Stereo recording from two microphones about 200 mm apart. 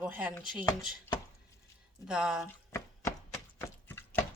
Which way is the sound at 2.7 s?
15° left (ahead or behind).